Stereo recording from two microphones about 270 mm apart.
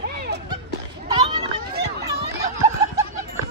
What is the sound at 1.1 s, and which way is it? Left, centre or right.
Children playing, right.